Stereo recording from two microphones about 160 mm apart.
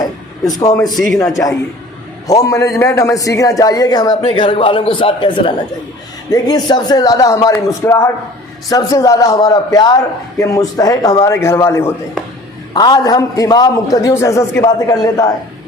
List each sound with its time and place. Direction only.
0.7 s a man's voice: 20° left (ahead or behind)
0.9 s a man's voice: centre (ahead or behind)
1.2 s a man's voice: 20° left (ahead or behind)